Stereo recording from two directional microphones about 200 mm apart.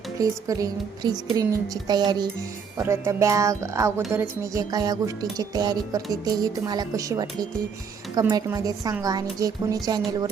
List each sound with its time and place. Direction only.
0.2 s speech: 15° right (ahead or behind)
1.4 s music: 20° right (ahead or behind)
2.7 s speech: 15° right (ahead or behind)
4.1 s music: 15° right (ahead or behind)